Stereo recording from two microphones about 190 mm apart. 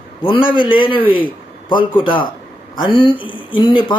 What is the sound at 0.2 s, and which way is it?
Speech, 25° left (ahead or behind).